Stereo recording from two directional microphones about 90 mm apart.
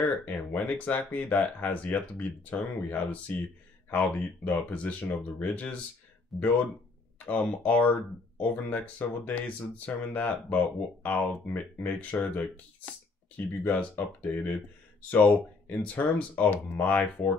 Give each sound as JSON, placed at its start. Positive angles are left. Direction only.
{"t": 0.2, "sound": "speech", "side_deg": 20}
{"t": 6.3, "sound": "speech", "side_deg": 0}
{"t": 7.2, "sound": "speech", "side_deg": 20}